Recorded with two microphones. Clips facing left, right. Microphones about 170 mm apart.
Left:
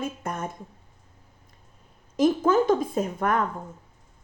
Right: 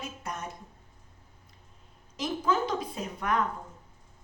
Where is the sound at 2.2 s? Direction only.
50° left (ahead or behind).